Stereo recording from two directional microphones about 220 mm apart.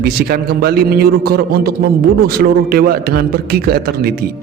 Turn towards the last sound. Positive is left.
turn(degrees=-45)  # may be behind; listen again after turning